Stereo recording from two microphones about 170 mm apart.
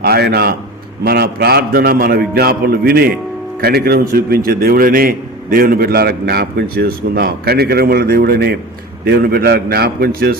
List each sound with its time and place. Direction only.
0.0 s a man's voice: 70° right (ahead or behind)